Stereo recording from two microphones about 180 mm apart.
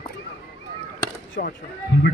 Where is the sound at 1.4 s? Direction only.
60° left (ahead or behind).